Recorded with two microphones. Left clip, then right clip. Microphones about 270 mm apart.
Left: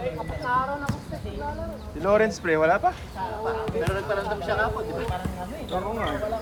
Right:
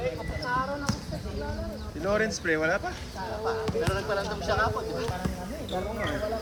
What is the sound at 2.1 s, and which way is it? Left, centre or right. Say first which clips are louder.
Speech: left 5 dB; centre.